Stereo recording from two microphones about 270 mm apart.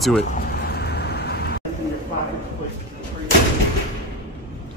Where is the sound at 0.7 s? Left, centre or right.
Left.